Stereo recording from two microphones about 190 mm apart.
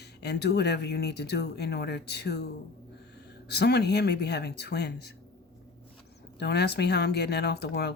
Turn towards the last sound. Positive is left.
turn(degrees=60)  # may be behind; listen again after turning